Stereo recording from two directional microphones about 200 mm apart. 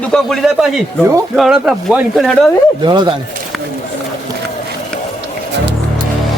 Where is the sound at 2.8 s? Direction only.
20° right (ahead or behind).